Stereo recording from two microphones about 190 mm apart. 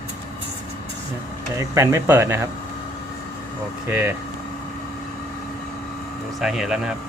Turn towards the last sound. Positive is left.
turn(degrees=-5)  # may be behind; listen again after turning